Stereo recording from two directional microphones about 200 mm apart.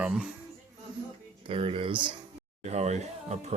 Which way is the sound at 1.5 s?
30° right (ahead or behind).